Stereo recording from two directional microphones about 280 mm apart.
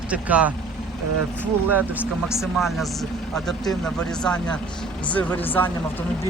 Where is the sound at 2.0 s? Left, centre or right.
Centre.